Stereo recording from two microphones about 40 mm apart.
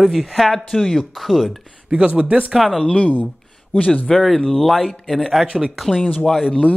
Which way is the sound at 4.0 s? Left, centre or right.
Centre.